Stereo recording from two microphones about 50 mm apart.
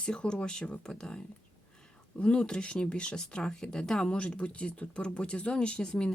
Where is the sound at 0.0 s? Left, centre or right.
Centre.